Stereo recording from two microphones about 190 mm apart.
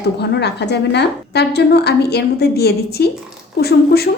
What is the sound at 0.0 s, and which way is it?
A woman's voice, 60° left (ahead or behind).